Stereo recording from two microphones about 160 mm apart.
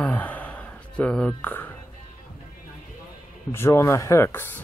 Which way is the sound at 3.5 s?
15° left (ahead or behind).